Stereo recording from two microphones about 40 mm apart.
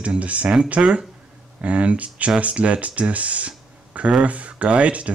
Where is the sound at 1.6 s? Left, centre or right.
Right.